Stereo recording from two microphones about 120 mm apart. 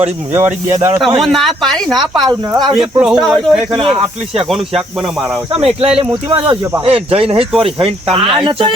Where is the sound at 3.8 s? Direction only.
50° right (ahead or behind).